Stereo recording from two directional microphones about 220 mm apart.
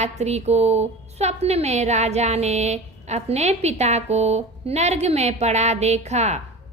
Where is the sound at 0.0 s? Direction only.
30° right (ahead or behind).